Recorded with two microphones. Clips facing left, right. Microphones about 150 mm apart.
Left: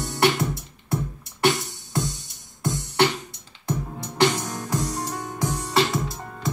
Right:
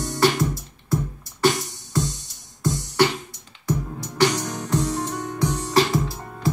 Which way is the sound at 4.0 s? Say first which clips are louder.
Even; 55° left (ahead or behind).